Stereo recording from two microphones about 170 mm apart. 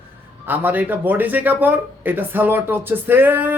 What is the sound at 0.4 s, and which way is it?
Speech, 10° right (ahead or behind).